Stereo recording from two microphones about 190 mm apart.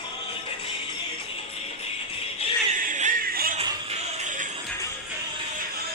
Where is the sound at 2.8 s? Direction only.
45° right (ahead or behind).